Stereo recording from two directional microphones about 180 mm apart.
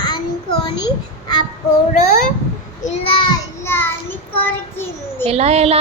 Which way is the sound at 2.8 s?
35° left (ahead or behind).